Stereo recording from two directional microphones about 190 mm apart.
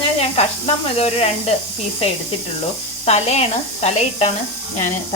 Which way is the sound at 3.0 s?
35° left (ahead or behind).